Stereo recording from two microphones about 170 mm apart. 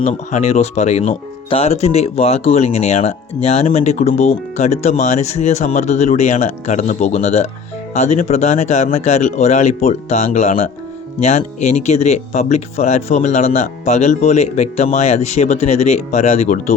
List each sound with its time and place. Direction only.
0.0 s speech: 45° left (ahead or behind)